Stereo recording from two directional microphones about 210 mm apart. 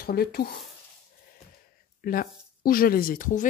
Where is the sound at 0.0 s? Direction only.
45° left (ahead or behind).